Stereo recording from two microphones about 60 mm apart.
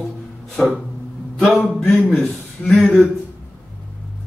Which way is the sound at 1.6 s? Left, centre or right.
Centre.